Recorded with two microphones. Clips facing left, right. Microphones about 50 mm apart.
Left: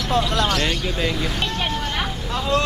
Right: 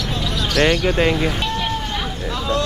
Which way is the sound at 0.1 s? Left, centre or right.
Left.